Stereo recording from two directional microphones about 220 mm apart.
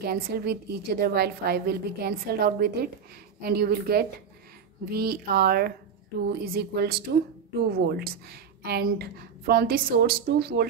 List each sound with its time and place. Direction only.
0.0 s a woman's voice: 45° right (ahead or behind)